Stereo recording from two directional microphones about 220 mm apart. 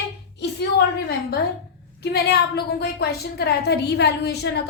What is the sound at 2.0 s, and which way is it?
A woman's voice, 45° left (ahead or behind).